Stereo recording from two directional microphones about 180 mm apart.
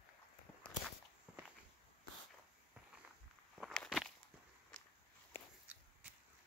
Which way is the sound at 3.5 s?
Centre (ahead or behind).